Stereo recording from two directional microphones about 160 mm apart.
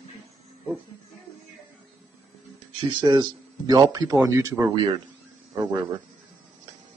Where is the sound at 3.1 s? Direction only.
25° right (ahead or behind).